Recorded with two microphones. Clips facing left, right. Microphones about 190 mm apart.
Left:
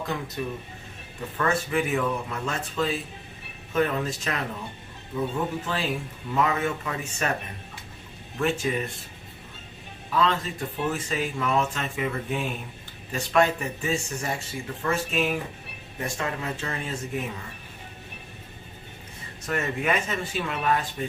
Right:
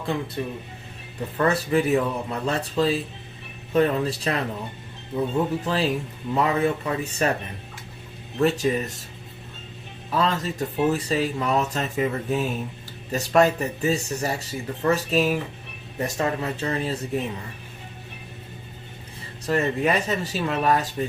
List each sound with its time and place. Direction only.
0.4 s speech: 30° right (ahead or behind)
8.4 s speech: 35° right (ahead or behind)
10.1 s speech: 40° right (ahead or behind)
19.5 s speech: 35° right (ahead or behind)